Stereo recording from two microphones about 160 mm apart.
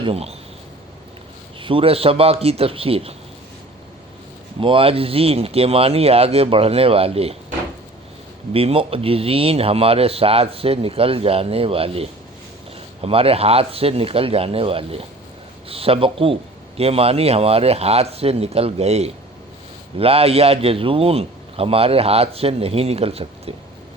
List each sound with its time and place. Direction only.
0.0 s a man's voice: 40° right (ahead or behind)
1.6 s a man's voice: 35° right (ahead or behind)
4.6 s a man's voice: 35° right (ahead or behind)
8.5 s a man's voice: 35° right (ahead or behind)